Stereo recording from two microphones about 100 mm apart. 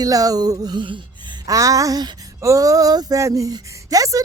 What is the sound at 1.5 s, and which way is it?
Speech, 35° right (ahead or behind).